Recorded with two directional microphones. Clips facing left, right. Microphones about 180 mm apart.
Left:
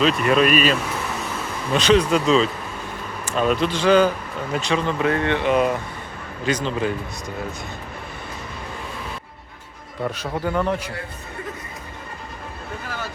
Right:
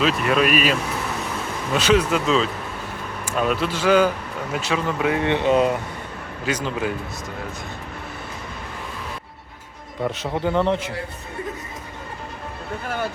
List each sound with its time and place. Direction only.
0.0 s speech: centre (ahead or behind); by 5.8 s 20° right (ahead or behind)
6.4 s speech: 10° right (ahead or behind)
10.0 s a man's voice: 15° right (ahead or behind)